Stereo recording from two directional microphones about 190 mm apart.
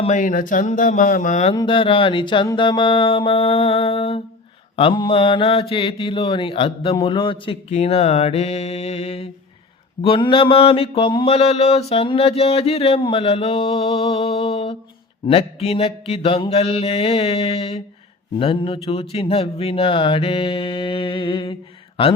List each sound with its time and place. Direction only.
0.0 s speech: 40° left (ahead or behind)
1.5 s mantra: 25° left (ahead or behind)